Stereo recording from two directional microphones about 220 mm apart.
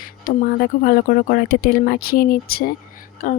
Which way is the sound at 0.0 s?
40° left (ahead or behind).